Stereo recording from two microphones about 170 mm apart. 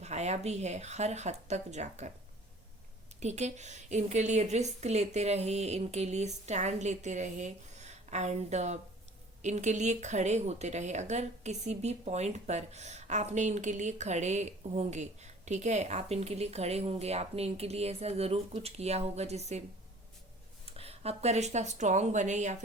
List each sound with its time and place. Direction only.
0.0 s speech: 40° right (ahead or behind)
3.2 s speech: 40° right (ahead or behind)
20.7 s speech: 35° right (ahead or behind)